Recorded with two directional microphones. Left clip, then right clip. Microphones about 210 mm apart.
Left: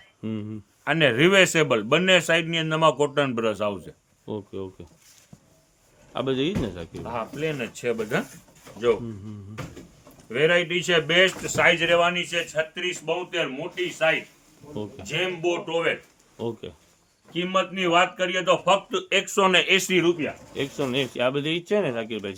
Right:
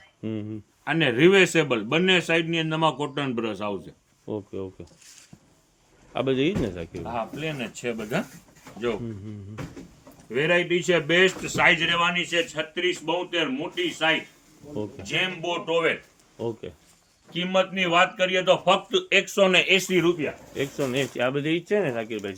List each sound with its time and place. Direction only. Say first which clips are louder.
0.2 s speech: right 1 dB; 10° left (ahead or behind)
0.9 s a man's voice: even; 40° left (ahead or behind)
4.3 s a man's voice: right 1 dB; 10° left (ahead or behind)
6.1 s a man's voice: right 1 dB; 5° right (ahead or behind)
6.9 s speech: right 1 dB; 30° left (ahead or behind)
10.2 s speech: left 2 dB; 25° left (ahead or behind)
15.0 s a man's voice: left 1 dB; 15° left (ahead or behind)